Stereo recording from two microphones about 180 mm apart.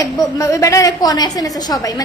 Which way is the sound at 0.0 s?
20° left (ahead or behind).